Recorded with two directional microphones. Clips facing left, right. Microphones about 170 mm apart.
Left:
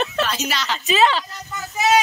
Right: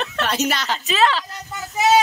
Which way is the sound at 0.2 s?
60° right (ahead or behind).